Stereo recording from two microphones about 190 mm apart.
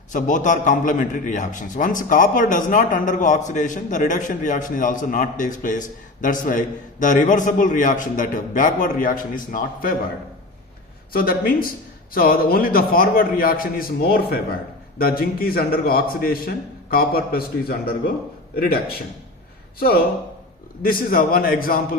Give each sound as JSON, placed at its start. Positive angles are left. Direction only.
{"t": 0.1, "sound": "a man's voice", "side_deg": 40}
{"t": 11.1, "sound": "a man's voice", "side_deg": 50}
{"t": 20.8, "sound": "a man's voice", "side_deg": 50}